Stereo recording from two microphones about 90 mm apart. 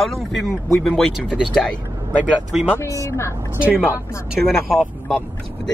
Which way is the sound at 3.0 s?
35° left (ahead or behind).